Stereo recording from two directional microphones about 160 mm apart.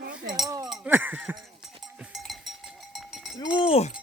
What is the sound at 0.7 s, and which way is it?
Speech, 5° right (ahead or behind).